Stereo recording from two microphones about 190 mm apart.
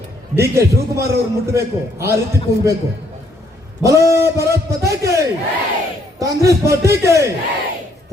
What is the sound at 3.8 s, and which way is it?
A man's voice, 5° right (ahead or behind).